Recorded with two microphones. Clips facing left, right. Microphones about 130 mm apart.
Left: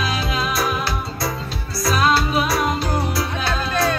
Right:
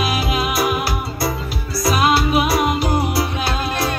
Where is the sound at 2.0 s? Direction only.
15° right (ahead or behind).